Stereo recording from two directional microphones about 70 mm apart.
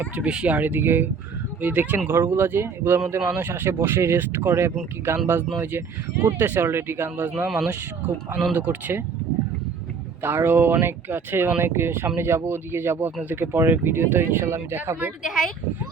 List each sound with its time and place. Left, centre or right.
0.2 s speech: centre; by 7.4 s right
7.4 s speech: centre
7.7 s speech: right
10.2 s speech: right
15.2 s speech: centre